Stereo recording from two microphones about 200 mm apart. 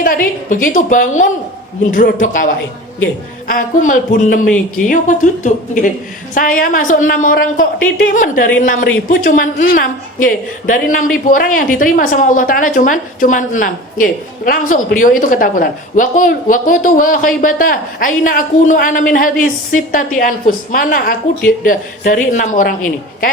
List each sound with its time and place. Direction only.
0.0 s speech: 45° left (ahead or behind)
3.4 s a woman's voice: 45° left (ahead or behind)